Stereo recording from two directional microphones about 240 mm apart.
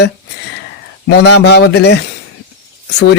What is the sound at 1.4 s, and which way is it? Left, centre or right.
Speech, left.